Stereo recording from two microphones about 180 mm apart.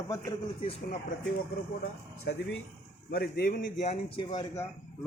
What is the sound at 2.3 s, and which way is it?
Speech, 70° left (ahead or behind).